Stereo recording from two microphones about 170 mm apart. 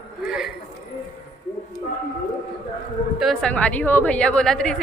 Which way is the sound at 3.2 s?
Centre (ahead or behind).